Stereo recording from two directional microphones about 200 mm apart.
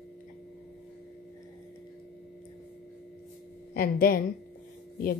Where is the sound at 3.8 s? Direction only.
50° left (ahead or behind).